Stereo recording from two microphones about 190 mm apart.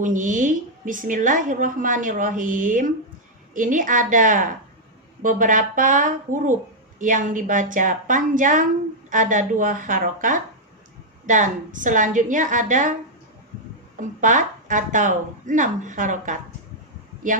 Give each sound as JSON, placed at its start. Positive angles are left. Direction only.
{"t": 0.0, "sound": "a woman's voice", "side_deg": -45}
{"t": 14.2, "sound": "speech", "side_deg": -40}